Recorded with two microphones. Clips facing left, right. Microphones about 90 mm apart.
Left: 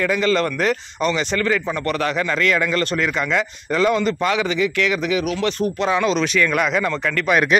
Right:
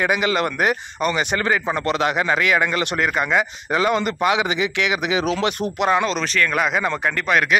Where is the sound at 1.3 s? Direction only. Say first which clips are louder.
Even; 30° right (ahead or behind); by 3.1 s 10° right (ahead or behind).